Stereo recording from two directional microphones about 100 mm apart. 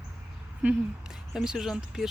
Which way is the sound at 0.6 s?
15° right (ahead or behind).